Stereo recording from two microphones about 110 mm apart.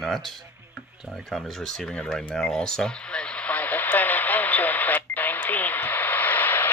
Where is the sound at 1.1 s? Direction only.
5° left (ahead or behind).